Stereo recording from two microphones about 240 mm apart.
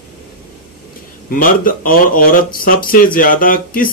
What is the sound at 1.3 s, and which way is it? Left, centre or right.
Speech, left.